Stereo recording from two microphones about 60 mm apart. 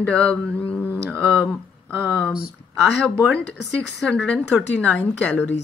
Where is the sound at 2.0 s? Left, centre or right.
Centre.